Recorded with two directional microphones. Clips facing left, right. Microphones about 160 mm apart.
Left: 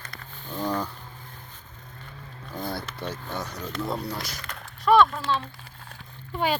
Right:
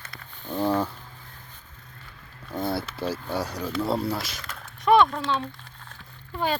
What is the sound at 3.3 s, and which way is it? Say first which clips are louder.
Speech: right 4 dB; 10° right (ahead or behind).